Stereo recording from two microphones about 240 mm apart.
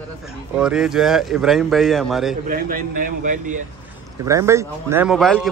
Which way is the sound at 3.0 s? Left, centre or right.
Right.